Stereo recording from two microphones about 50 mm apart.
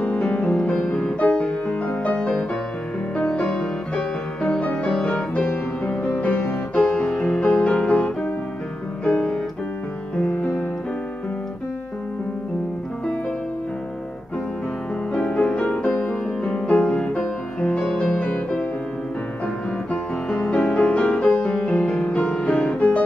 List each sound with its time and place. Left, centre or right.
0.0 s music: left
0.4 s music: centre
5.9 s music: left
6.7 s music: centre
15.1 s music: left